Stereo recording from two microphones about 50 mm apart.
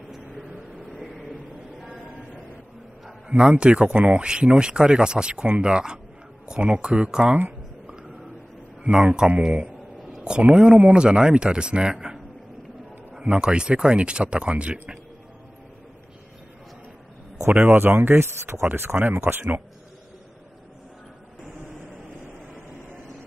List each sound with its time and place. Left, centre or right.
1.1 s a sound: centre
3.3 s speech: right
8.9 s speech: centre
9.4 s a sound: centre
10.2 s speech: centre
13.2 s speech: right
17.6 s speech: right